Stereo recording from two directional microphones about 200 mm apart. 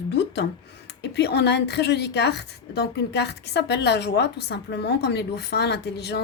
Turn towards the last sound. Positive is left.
turn(degrees=55)  # may be behind; listen again after turning